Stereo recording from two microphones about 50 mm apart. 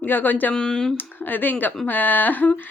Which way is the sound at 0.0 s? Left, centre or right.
Left.